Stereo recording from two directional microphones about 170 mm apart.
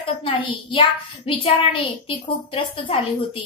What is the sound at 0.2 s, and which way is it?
A woman's voice, 30° left (ahead or behind).